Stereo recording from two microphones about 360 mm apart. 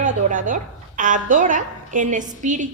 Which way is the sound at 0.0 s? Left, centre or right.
Right.